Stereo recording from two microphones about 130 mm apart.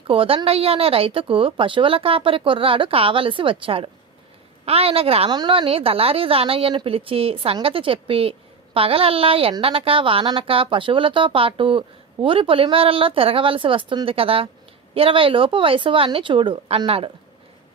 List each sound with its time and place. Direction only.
0.1 s a woman's voice: 45° right (ahead or behind)